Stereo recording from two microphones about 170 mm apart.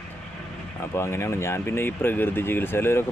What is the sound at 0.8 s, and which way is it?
Speech, 15° left (ahead or behind).